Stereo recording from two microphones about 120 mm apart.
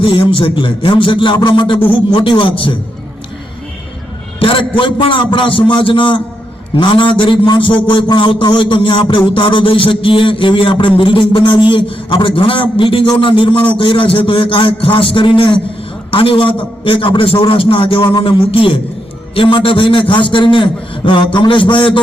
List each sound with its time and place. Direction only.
0.0 s a man's voice: 45° left (ahead or behind)
4.4 s a man's voice: 45° left (ahead or behind)